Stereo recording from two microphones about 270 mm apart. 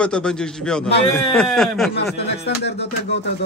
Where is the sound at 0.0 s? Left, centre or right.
Centre.